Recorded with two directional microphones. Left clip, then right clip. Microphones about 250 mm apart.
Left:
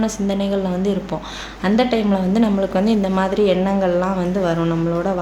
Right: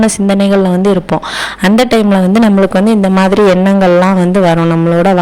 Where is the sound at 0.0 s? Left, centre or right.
Right.